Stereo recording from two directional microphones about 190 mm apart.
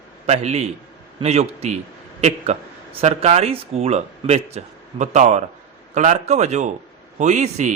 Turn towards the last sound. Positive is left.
turn(degrees=-40)  # may be behind; listen again after turning